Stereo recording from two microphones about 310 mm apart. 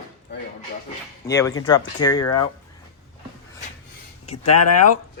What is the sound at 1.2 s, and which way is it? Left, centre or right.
Speech, centre.